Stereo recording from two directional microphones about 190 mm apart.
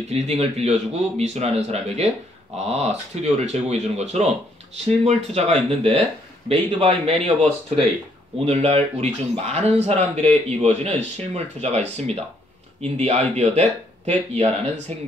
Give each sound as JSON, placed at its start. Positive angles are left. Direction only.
{"t": 0.1, "sound": "speech", "side_deg": -35}
{"t": 7.4, "sound": "speech", "side_deg": 0}
{"t": 8.5, "sound": "speech", "side_deg": -30}
{"t": 12.9, "sound": "speech", "side_deg": -35}